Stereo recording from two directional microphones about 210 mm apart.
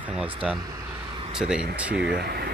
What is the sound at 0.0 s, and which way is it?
Speech, 5° right (ahead or behind).